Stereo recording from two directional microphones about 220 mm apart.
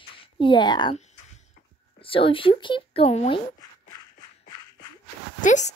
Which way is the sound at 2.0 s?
25° left (ahead or behind).